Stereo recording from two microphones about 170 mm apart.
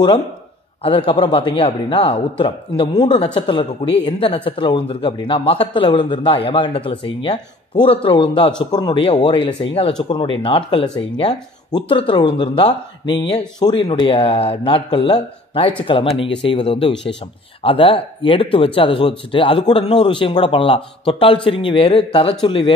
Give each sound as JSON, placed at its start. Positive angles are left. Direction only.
{"t": 0.8, "sound": "speech", "side_deg": 30}